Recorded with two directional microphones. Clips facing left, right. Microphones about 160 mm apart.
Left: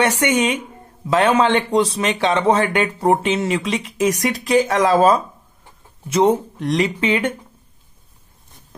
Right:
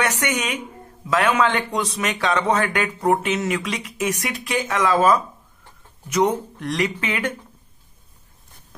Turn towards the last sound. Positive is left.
turn(degrees=25)  # may be behind; listen again after turning